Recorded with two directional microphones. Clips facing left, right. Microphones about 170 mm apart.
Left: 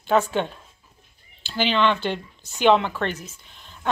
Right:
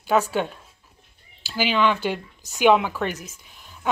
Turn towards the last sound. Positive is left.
turn(degrees=-10)  # may be behind; listen again after turning